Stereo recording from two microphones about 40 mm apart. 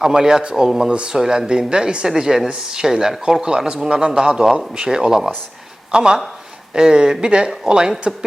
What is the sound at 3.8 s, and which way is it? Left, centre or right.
Speech, right.